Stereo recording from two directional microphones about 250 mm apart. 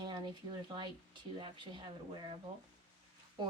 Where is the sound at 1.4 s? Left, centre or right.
Centre.